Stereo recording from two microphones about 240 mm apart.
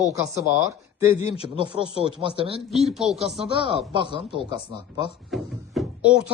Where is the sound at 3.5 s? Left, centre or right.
Right.